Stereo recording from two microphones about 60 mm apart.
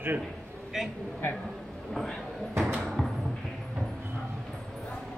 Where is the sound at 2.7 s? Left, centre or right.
Centre.